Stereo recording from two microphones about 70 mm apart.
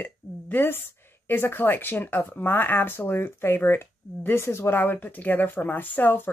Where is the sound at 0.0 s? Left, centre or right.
Left.